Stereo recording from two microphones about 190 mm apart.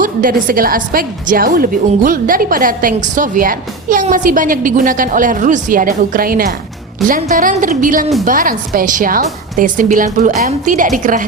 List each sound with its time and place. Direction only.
0.0 s a woman's voice: 45° right (ahead or behind)